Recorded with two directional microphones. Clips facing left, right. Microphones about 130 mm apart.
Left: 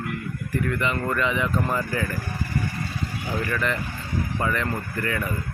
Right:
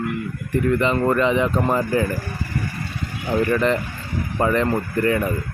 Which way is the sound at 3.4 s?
30° right (ahead or behind).